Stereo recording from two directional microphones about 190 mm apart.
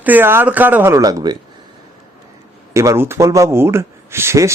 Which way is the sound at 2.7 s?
15° right (ahead or behind).